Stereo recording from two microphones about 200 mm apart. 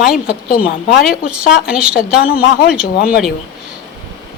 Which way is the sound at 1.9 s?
50° left (ahead or behind).